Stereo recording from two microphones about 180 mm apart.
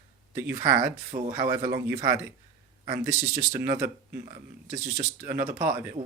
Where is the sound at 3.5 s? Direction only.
15° right (ahead or behind).